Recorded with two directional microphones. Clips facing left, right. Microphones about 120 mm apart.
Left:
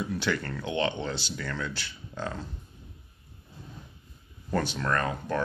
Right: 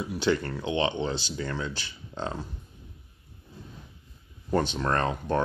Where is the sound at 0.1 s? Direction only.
15° right (ahead or behind).